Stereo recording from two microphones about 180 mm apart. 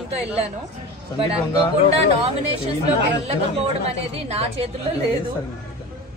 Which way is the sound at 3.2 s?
35° right (ahead or behind).